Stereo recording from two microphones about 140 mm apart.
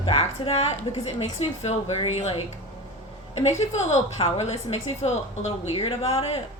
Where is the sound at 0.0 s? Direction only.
40° left (ahead or behind).